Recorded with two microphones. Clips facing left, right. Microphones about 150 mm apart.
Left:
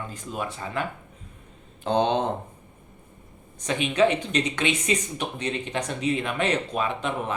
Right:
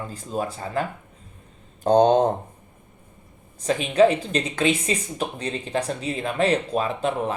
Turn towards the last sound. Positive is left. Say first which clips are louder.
# right 3 dB
turn(degrees=-35)  # may be behind; listen again after turning